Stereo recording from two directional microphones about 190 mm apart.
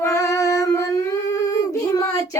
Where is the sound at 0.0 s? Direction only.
15° left (ahead or behind).